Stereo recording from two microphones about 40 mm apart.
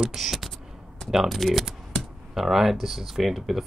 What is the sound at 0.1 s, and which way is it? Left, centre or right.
Speech, centre.